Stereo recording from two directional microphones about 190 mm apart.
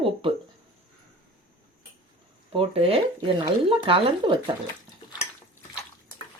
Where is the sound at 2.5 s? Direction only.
30° right (ahead or behind).